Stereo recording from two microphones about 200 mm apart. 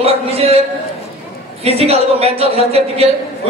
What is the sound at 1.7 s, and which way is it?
A woman's voice, 30° right (ahead or behind).